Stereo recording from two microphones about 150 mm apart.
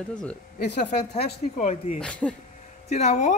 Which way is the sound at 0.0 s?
5° left (ahead or behind).